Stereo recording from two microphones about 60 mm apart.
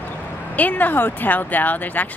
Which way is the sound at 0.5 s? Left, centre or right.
Left.